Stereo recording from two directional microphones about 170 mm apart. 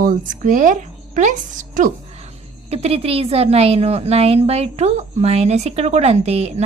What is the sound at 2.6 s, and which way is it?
A woman's voice, 35° right (ahead or behind).